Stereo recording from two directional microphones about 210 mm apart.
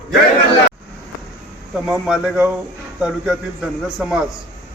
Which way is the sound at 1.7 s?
5° right (ahead or behind).